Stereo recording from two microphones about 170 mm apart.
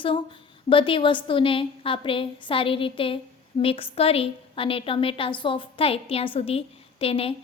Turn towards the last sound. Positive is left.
turn(degrees=35)  # may be behind; listen again after turning